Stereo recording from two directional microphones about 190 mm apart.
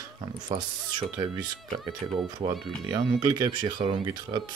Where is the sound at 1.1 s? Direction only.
20° right (ahead or behind).